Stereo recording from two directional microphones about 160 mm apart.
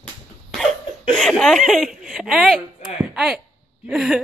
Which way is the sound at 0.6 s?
5° left (ahead or behind).